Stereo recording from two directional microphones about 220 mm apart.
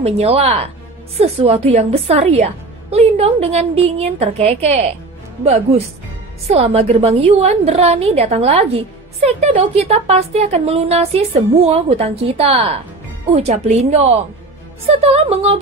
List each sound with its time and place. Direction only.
0.0 s a woman's voice: 30° right (ahead or behind)